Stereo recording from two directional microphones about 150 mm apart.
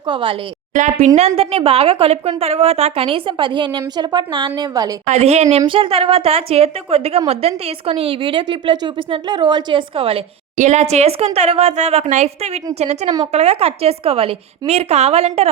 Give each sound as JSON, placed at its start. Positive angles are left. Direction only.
{"t": 0.1, "sound": "a woman's voice", "side_deg": -35}
{"t": 0.9, "sound": "a woman's voice", "side_deg": -45}
{"t": 5.0, "sound": "a woman's voice", "side_deg": -45}
{"t": 5.6, "sound": "a woman's voice", "side_deg": -35}
{"t": 10.6, "sound": "a woman's voice", "side_deg": -50}